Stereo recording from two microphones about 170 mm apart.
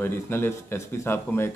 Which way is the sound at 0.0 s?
15° left (ahead or behind).